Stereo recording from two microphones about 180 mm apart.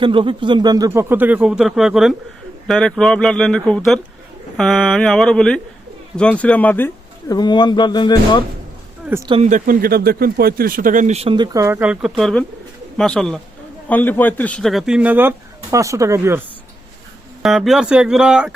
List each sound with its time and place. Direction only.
0.0 s speech: 30° right (ahead or behind); by 8.4 s 25° left (ahead or behind)
9.0 s speech: 15° right (ahead or behind)
9.3 s speech: 40° right (ahead or behind)
11.5 s speech: 15° right (ahead or behind)
17.4 s speech: centre (ahead or behind)